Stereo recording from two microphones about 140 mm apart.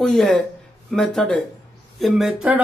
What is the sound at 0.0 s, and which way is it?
Speech, centre (ahead or behind).